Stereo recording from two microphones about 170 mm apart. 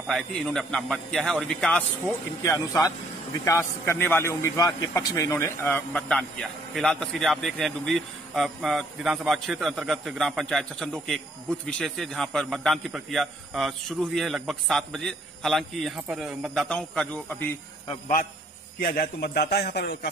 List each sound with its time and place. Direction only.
0.1 s a man's voice: 5° left (ahead or behind)
2.4 s a man's voice: 20° left (ahead or behind)
18.8 s a man's voice: 60° left (ahead or behind); by 20.1 s 75° left (ahead or behind)